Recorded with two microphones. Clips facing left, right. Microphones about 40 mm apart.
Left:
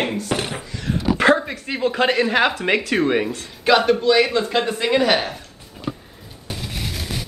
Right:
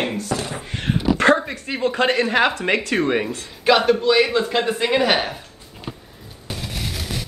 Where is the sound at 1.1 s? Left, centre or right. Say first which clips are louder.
Left 1 dB; centre.